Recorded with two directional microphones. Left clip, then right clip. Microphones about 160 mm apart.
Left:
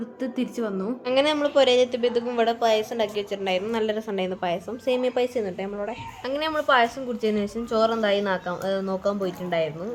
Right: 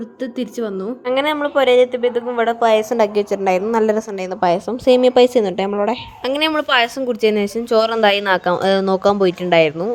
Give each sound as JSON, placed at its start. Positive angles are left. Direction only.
{"t": 0.2, "sound": "a woman's voice", "side_deg": -30}
{"t": 1.0, "sound": "speech", "side_deg": -5}
{"t": 2.9, "sound": "a woman's voice", "side_deg": -45}